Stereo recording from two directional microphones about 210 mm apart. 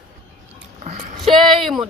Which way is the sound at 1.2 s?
Centre (ahead or behind).